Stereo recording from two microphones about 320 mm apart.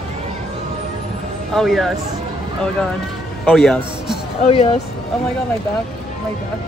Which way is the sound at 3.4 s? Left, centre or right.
Centre.